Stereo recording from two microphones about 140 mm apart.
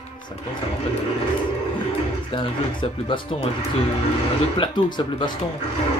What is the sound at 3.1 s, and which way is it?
Speech, 35° left (ahead or behind).